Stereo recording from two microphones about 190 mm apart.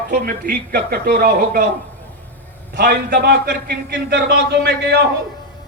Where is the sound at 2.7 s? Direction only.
60° right (ahead or behind).